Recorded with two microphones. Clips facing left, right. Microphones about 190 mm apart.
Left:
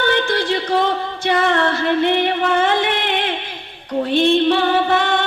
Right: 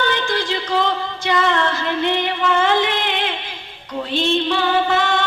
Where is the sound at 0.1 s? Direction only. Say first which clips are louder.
Left 3 dB; 55° left (ahead or behind).